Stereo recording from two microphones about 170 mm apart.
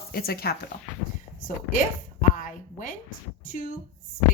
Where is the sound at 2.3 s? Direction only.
50° left (ahead or behind).